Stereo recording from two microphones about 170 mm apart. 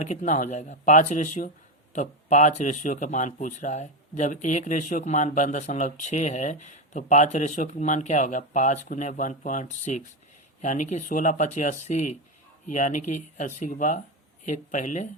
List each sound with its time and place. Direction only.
0.0 s speech: 45° left (ahead or behind)